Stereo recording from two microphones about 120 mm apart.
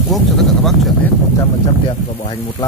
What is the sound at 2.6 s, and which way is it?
Speech, 35° left (ahead or behind).